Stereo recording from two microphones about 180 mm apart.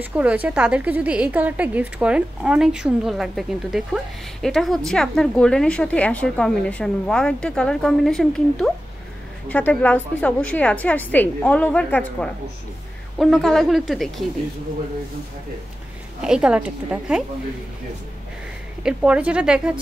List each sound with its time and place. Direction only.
0.0 s a woman's voice: 10° right (ahead or behind)
16.2 s a woman's voice: 5° right (ahead or behind)
18.8 s a woman's voice: 5° right (ahead or behind)